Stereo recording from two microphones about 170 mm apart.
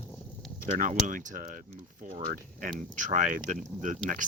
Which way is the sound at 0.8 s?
50° right (ahead or behind).